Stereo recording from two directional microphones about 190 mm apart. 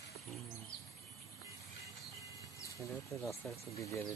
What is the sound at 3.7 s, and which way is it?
Speech, 15° left (ahead or behind).